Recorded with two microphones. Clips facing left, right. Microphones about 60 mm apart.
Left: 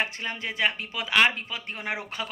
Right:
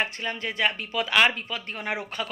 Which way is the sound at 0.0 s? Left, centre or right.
Left.